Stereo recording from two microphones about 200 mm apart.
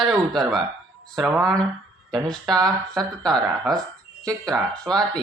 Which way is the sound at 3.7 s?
Centre (ahead or behind).